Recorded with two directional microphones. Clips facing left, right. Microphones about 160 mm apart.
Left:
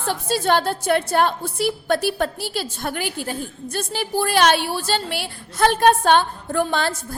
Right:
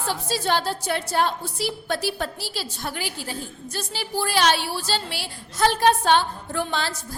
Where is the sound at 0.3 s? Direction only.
55° left (ahead or behind).